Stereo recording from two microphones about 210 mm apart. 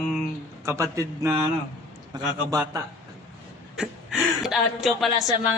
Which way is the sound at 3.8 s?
Centre (ahead or behind).